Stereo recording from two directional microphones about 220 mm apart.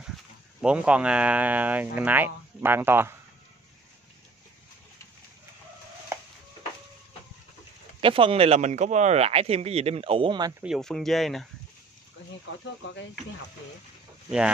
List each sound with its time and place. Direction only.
0.6 s speech: 5° right (ahead or behind)
8.0 s speech: 25° right (ahead or behind)
10.6 s speech: centre (ahead or behind)